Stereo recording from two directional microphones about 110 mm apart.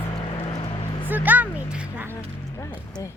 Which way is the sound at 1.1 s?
15° right (ahead or behind).